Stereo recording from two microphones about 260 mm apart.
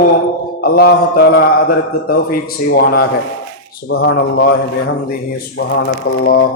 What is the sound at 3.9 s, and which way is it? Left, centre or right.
A man's voice, left.